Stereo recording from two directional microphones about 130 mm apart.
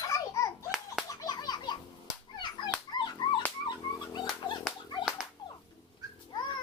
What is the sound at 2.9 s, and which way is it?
Dog, 35° left (ahead or behind).